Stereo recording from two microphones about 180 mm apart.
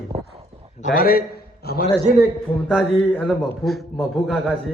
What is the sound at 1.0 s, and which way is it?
Speech, 55° left (ahead or behind).